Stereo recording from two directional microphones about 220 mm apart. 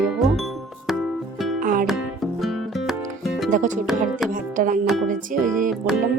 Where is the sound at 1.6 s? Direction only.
40° right (ahead or behind).